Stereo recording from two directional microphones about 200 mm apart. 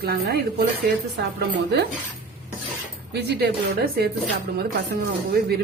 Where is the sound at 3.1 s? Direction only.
55° right (ahead or behind).